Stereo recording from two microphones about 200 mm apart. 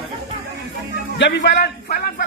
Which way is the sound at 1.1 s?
60° left (ahead or behind).